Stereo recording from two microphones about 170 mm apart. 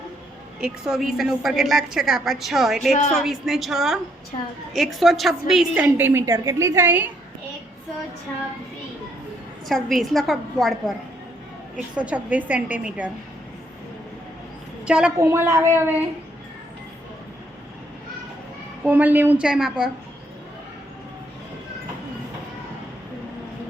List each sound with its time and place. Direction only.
0.6 s a woman's voice: 5° right (ahead or behind)
9.6 s a woman's voice: centre (ahead or behind)
11.9 s a woman's voice: 10° right (ahead or behind)
14.8 s a woman's voice: 5° right (ahead or behind)
15.2 s a woman's voice: 15° right (ahead or behind)
18.9 s a woman's voice: 10° right (ahead or behind)